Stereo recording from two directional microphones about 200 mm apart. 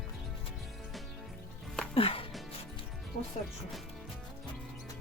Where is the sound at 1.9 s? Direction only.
30° left (ahead or behind).